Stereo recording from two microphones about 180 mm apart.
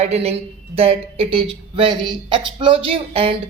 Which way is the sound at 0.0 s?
35° right (ahead or behind).